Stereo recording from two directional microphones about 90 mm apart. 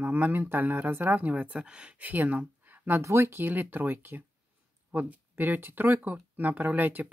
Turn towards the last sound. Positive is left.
turn(degrees=-20)  # may be behind; listen again after turning